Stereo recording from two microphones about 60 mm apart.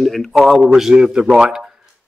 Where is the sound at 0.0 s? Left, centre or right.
Centre.